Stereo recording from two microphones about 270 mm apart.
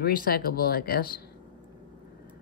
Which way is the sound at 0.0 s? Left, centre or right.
Left.